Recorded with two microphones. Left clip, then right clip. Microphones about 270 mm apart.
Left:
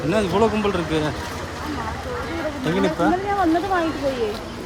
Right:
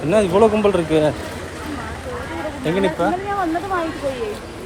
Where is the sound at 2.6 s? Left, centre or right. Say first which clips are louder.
Right 3 dB; left.